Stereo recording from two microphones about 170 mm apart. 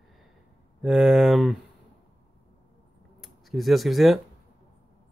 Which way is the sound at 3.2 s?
Centre (ahead or behind).